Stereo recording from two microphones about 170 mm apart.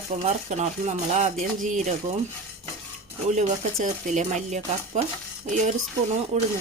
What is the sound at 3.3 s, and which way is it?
Speech, 45° right (ahead or behind).